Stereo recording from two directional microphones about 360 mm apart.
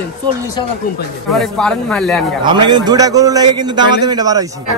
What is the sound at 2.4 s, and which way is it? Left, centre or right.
A man's voice, centre.